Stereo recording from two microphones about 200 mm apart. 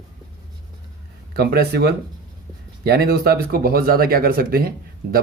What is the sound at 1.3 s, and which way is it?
Speech, 50° right (ahead or behind).